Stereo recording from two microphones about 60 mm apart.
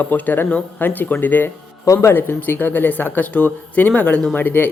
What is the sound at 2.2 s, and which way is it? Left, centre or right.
A man's voice, left.